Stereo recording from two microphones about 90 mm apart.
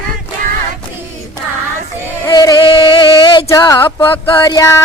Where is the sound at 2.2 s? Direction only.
45° left (ahead or behind); by 3.4 s 60° left (ahead or behind).